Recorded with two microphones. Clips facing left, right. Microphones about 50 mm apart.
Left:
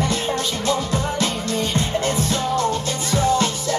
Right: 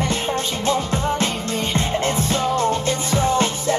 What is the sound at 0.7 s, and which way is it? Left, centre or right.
Music, right.